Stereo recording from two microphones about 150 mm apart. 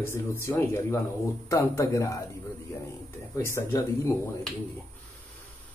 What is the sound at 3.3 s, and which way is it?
Speech, 15° left (ahead or behind).